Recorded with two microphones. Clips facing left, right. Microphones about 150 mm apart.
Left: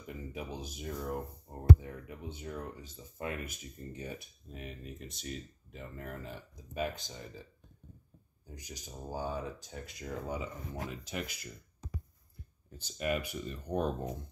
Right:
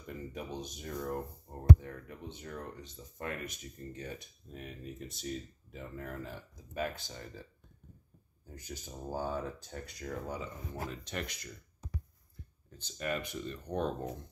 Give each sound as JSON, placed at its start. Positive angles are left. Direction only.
{"t": 0.0, "sound": "speech", "side_deg": 5}
{"t": 6.7, "sound": "speech", "side_deg": 20}
{"t": 8.5, "sound": "speech", "side_deg": 15}
{"t": 10.9, "sound": "speech", "side_deg": 5}
{"t": 12.7, "sound": "speech", "side_deg": 10}